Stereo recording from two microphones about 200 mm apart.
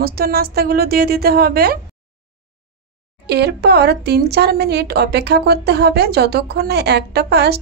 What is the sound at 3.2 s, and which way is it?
A woman's voice, 55° right (ahead or behind).